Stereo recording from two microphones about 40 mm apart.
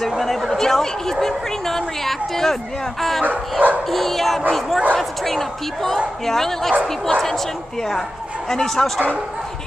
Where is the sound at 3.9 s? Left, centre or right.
Centre.